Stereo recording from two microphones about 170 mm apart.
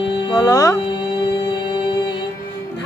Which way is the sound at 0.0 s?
25° left (ahead or behind).